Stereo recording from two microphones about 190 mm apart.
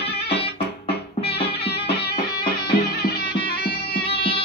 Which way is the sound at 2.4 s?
55° left (ahead or behind).